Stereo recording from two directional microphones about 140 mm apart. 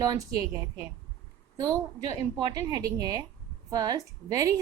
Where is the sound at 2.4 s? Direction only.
30° right (ahead or behind).